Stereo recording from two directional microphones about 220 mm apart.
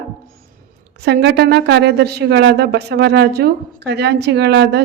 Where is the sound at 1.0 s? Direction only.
50° right (ahead or behind).